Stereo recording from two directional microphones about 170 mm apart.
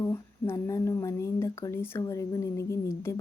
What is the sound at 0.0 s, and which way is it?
A woman's voice, 15° left (ahead or behind).